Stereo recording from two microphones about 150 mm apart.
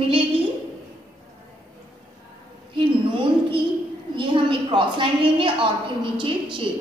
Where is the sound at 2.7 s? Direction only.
35° right (ahead or behind).